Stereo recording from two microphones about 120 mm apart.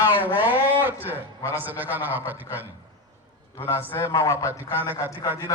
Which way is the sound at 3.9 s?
25° left (ahead or behind).